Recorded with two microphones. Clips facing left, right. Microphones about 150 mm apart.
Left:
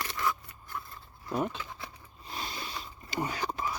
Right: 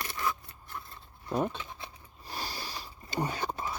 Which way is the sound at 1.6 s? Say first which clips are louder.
Left 1 dB; 25° right (ahead or behind).